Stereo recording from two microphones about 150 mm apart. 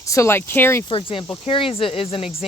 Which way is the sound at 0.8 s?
35° left (ahead or behind).